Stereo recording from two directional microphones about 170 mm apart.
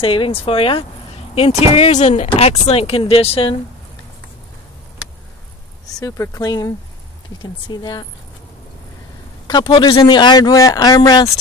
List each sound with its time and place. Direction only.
0.0 s speech: 30° left (ahead or behind)
5.9 s speech: 20° left (ahead or behind)
9.5 s speech: 25° left (ahead or behind)